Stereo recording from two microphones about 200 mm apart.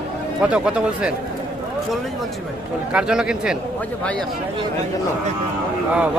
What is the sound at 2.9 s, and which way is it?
Speech, 5° right (ahead or behind).